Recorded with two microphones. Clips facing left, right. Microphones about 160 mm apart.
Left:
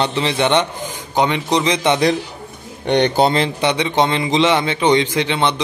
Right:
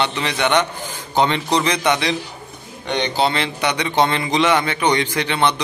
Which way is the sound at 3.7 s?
20° left (ahead or behind).